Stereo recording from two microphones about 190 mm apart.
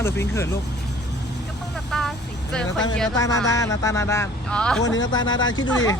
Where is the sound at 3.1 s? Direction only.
20° left (ahead or behind).